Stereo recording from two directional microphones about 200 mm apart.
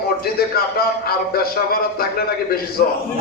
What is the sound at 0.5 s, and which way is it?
Speech, 50° left (ahead or behind).